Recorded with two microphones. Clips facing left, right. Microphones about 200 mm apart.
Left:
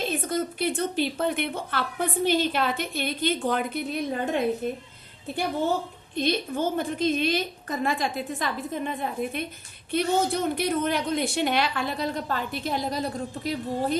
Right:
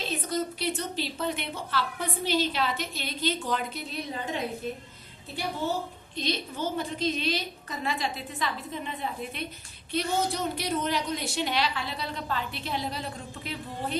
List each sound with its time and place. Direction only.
0.0 s a woman's voice: 50° left (ahead or behind)
6.1 s a woman's voice: 55° left (ahead or behind)